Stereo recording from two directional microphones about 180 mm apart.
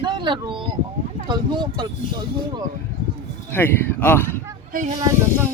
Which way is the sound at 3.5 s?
10° left (ahead or behind).